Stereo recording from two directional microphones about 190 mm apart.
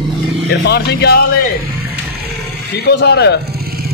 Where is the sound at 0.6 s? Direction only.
60° left (ahead or behind).